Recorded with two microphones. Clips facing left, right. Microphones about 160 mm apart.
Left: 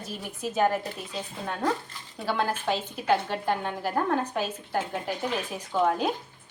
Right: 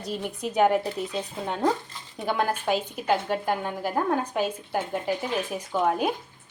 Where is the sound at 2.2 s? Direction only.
15° right (ahead or behind).